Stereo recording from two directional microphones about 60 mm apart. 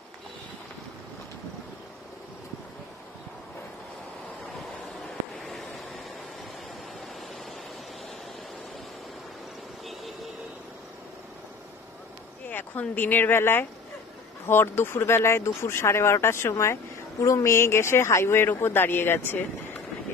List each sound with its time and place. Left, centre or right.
12.4 s speech: left
17.2 s speech: left